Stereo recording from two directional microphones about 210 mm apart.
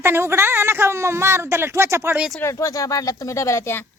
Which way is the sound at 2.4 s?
15° left (ahead or behind).